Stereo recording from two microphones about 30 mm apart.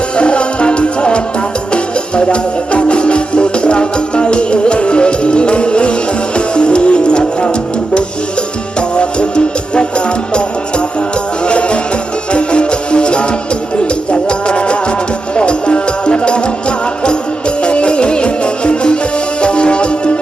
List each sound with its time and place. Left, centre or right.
0.2 s music: left
2.2 s music: left
9.0 s music: left
11.4 s music: left